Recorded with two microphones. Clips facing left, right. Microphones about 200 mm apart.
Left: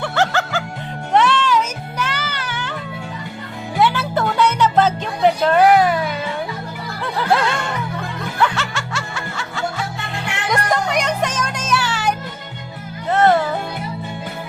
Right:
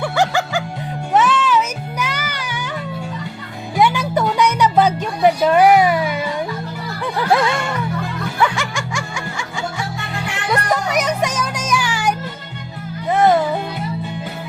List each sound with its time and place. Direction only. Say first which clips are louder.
0.0 s music: right 1 dB; 10° right (ahead or behind)
3.8 s music: right 1 dB; 15° right (ahead or behind)